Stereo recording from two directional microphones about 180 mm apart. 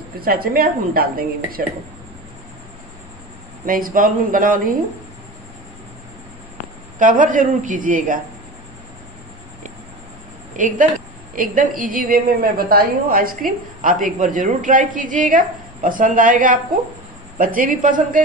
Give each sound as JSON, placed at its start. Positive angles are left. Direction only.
{"t": 0.2, "sound": "a woman's voice", "side_deg": -55}
{"t": 3.6, "sound": "a woman's voice", "side_deg": -50}
{"t": 7.0, "sound": "a woman's voice", "side_deg": -45}
{"t": 10.5, "sound": "a woman's voice", "side_deg": -45}